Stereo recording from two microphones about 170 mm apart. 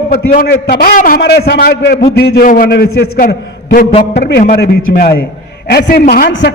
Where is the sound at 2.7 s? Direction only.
70° left (ahead or behind).